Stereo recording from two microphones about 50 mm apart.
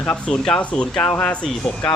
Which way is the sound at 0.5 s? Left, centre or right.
Left.